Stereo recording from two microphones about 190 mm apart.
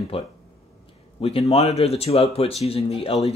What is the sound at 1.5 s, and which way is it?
Speech, 35° left (ahead or behind).